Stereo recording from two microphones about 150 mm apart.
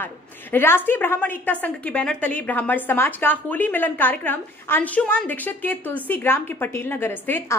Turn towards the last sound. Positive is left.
turn(degrees=15)  # may be behind; listen again after turning